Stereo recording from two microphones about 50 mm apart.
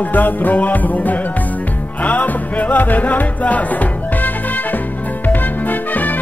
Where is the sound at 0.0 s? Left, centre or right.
Left.